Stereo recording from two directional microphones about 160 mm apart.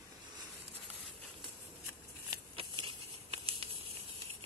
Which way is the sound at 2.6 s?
35° right (ahead or behind).